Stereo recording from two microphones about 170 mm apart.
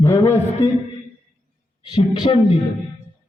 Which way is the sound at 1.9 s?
30° left (ahead or behind).